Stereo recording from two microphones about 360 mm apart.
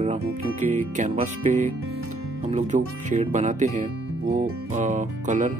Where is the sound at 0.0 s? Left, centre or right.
Centre.